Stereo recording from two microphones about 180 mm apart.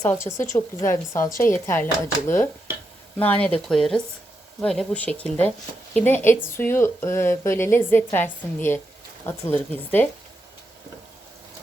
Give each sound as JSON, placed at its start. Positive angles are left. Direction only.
{"t": 0.0, "sound": "speech", "side_deg": 15}